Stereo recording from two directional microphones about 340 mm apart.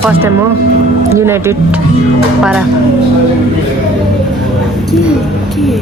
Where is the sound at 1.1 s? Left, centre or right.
Centre.